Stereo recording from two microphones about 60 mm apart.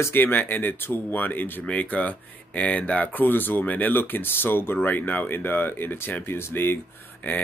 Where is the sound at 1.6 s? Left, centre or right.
Left.